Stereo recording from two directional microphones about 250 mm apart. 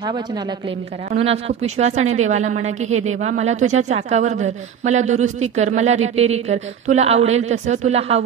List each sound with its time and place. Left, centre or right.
0.0 s speech: centre